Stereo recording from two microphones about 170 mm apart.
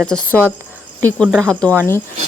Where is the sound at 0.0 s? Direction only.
5° left (ahead or behind).